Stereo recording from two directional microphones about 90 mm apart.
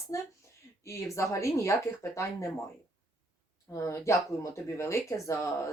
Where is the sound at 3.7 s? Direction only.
35° left (ahead or behind).